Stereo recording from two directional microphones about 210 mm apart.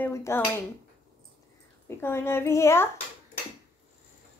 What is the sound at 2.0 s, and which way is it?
Speech, 10° left (ahead or behind).